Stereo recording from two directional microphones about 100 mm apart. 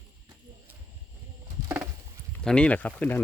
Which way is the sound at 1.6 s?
15° right (ahead or behind).